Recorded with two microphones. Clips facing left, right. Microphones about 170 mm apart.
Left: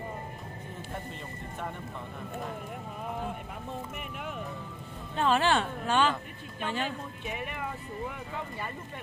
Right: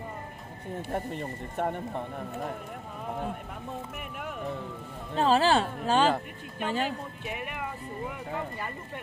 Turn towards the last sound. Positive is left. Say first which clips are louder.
# right 1 dB
turn(degrees=-5)  # may be behind; listen again after turning